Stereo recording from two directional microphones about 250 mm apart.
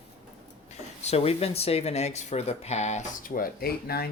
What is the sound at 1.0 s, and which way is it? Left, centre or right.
Speech, left.